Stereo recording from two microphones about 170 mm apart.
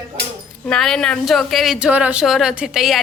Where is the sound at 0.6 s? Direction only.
5° left (ahead or behind).